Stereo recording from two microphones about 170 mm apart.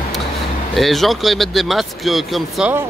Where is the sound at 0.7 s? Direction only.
Centre (ahead or behind).